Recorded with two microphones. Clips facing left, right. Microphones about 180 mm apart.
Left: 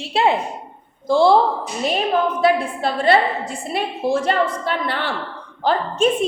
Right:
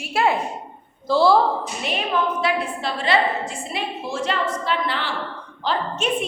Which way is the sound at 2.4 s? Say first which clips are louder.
Left 6 dB; 50° left (ahead or behind).